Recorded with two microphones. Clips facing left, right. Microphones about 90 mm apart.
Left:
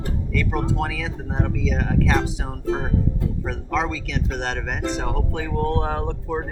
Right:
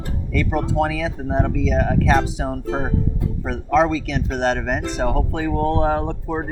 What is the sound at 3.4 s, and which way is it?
Speech, 45° right (ahead or behind).